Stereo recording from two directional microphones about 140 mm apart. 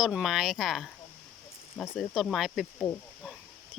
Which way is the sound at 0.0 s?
5° right (ahead or behind).